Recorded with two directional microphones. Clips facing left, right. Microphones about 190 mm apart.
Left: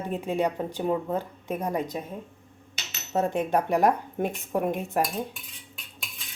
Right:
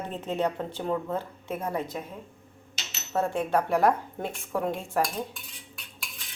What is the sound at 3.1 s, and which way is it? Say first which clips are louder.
Speech: left 1 dB; 20° left (ahead or behind).